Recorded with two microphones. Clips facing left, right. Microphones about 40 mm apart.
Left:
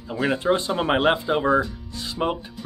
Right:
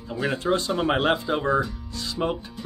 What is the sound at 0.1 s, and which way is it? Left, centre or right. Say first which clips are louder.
Speech: left 3 dB; centre.